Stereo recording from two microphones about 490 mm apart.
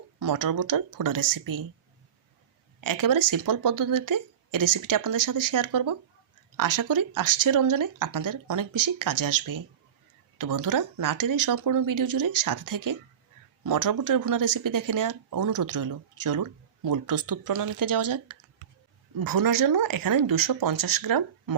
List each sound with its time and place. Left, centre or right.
0.2 s speech: right
2.8 s speech: right